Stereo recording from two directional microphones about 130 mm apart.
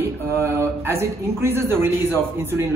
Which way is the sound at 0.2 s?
20° right (ahead or behind).